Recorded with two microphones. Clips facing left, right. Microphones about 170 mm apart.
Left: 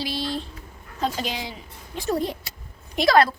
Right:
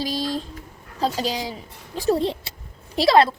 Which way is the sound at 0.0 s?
40° right (ahead or behind).